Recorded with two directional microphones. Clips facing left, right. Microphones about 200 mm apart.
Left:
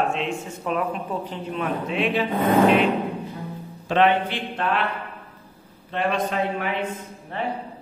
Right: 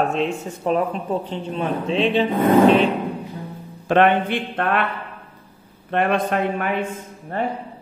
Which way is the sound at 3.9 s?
55° right (ahead or behind).